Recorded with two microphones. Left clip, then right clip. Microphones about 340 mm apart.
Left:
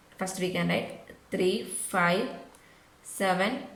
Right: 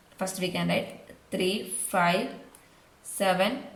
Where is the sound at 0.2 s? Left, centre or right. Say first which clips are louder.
Even; centre.